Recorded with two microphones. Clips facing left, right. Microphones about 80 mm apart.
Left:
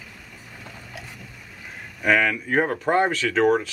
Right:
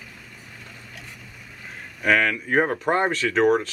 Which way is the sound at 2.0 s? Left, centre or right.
Centre.